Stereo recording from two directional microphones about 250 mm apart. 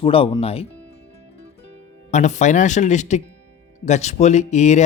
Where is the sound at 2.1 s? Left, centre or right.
Left.